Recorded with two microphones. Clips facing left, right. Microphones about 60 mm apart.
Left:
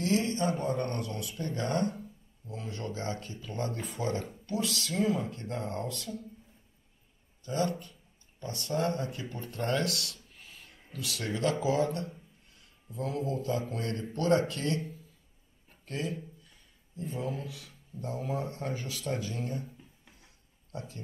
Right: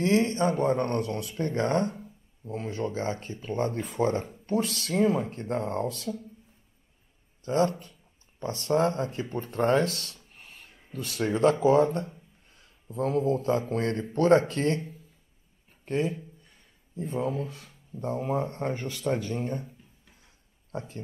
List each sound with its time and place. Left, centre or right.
0.0 s speech: right
5.5 s speech: right
7.4 s a man's voice: right
15.8 s speech: right
19.3 s speech: right
20.7 s speech: right